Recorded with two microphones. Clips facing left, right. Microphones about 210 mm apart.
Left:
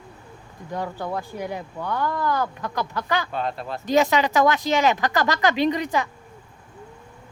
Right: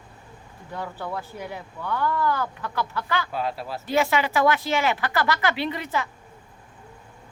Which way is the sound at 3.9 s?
20° left (ahead or behind).